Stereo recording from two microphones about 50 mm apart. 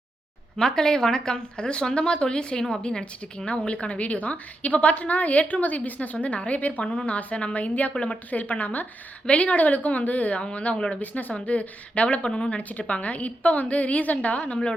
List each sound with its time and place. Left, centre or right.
0.5 s a woman's voice: centre; by 14.7 s left